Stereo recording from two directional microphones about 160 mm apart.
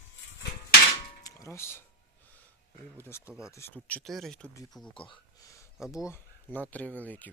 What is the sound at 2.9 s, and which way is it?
Speech, 15° left (ahead or behind).